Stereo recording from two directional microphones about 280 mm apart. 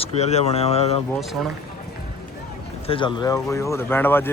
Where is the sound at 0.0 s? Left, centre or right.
Left.